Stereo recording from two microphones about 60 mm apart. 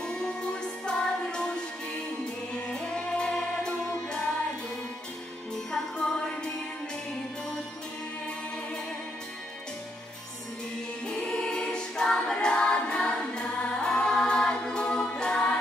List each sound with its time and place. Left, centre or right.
0.0 s music: centre
2.7 s music: centre
5.7 s music: centre
11.1 s choir: centre